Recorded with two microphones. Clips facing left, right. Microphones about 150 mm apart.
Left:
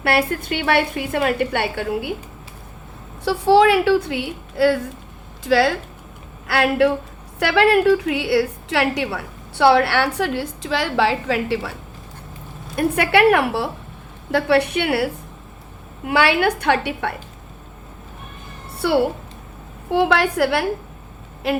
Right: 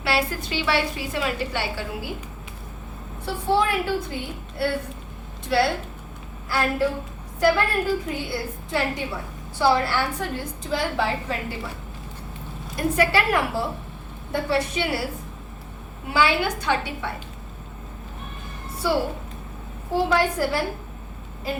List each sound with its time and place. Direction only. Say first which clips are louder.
0.0 s a woman's voice: left 5 dB; 55° left (ahead or behind)
3.2 s a woman's voice: left 9 dB; 85° left
6.5 s a woman's voice: left 6 dB; 75° left (ahead or behind)
12.7 s a woman's voice: left 4 dB; 60° left (ahead or behind)
14.3 s a woman's voice: left 7 dB; 80° left
18.8 s a woman's voice: left 6 dB; 65° left (ahead or behind)